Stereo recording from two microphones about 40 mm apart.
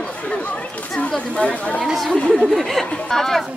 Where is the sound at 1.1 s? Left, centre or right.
Left.